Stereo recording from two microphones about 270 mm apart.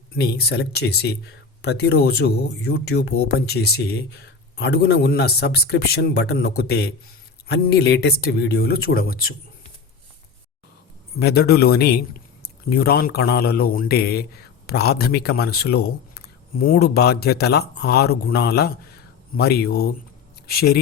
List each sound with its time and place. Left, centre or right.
0.2 s speech: left
11.2 s speech: left